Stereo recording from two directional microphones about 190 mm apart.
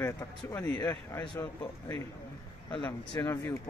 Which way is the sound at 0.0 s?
20° left (ahead or behind).